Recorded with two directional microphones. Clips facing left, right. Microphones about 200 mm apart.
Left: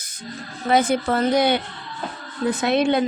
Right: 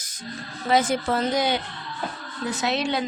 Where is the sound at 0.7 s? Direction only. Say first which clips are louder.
Left 3 dB; 55° left (ahead or behind).